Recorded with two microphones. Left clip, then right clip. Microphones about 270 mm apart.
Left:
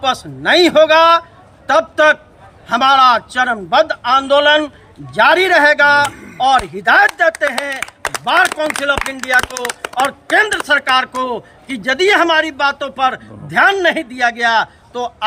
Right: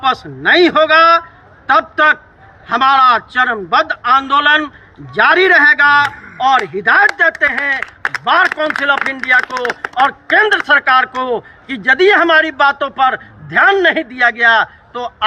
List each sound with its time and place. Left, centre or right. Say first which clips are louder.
0.4 s a man's voice: even; centre